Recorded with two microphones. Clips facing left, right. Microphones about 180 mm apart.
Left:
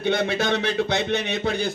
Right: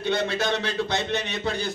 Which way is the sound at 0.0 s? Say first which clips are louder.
Left 2 dB; 60° left (ahead or behind).